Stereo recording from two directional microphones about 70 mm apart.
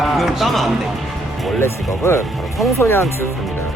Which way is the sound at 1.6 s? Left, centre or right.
Left.